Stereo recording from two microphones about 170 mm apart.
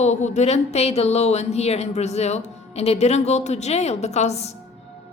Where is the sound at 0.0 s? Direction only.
40° left (ahead or behind).